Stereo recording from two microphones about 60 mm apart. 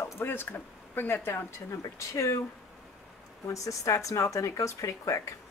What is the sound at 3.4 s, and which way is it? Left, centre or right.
Speech, left.